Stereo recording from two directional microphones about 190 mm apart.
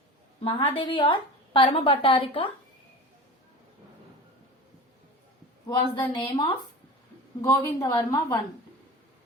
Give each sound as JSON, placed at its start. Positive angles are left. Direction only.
{"t": 0.4, "sound": "a woman's voice", "side_deg": 30}
{"t": 5.6, "sound": "a woman's voice", "side_deg": 20}